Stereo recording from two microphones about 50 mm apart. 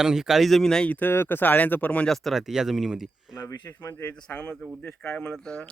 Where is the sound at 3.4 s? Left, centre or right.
Left.